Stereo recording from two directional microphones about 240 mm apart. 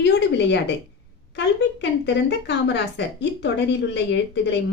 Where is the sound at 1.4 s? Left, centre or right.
Left.